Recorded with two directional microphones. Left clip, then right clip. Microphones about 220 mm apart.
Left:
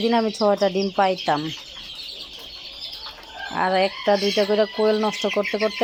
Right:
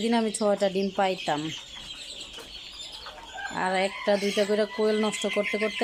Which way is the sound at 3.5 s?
Centre (ahead or behind).